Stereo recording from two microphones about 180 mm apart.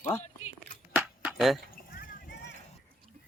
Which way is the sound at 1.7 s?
55° left (ahead or behind).